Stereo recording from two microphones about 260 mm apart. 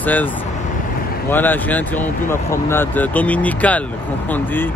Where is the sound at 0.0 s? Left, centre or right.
Centre.